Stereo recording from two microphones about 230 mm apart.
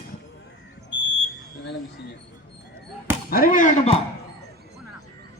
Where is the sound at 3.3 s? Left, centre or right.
Left.